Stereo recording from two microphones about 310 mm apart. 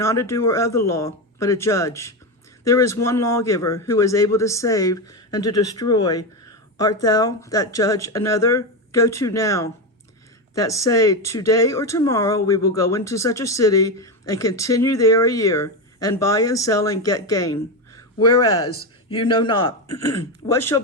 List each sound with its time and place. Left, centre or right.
0.0 s speech: centre
18.2 s speech: left
19.2 s speech: centre